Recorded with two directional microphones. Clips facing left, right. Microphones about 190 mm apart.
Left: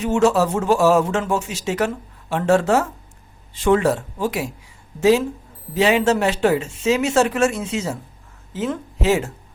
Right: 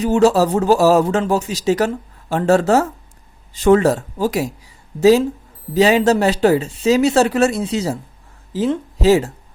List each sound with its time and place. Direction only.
0.0 s speech: 35° right (ahead or behind)